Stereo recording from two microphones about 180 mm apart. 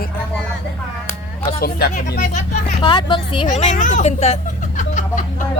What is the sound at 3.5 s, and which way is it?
Speech, 40° left (ahead or behind).